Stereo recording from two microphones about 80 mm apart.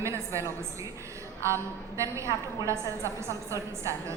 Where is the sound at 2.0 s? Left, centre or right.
Right.